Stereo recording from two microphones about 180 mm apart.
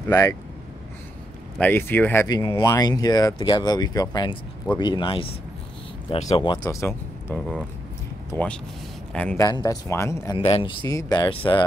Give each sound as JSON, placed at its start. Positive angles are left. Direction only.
{"t": 0.1, "sound": "speech", "side_deg": 15}
{"t": 1.6, "sound": "speech", "side_deg": 10}
{"t": 2.2, "sound": "speech", "side_deg": 20}
{"t": 6.6, "sound": "speech", "side_deg": 15}
{"t": 7.3, "sound": "speech", "side_deg": 5}
{"t": 9.4, "sound": "speech", "side_deg": 20}
{"t": 10.3, "sound": "speech", "side_deg": 30}